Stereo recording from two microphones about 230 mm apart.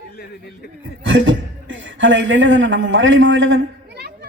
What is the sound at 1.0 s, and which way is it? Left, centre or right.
A man's voice, right.